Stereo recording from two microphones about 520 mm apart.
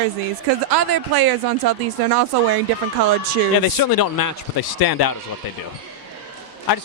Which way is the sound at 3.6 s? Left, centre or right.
Left.